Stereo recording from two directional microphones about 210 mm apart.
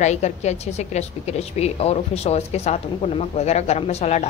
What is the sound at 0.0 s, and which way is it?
A woman's voice, 30° left (ahead or behind).